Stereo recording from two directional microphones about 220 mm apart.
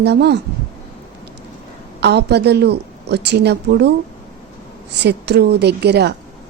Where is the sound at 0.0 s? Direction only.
50° right (ahead or behind).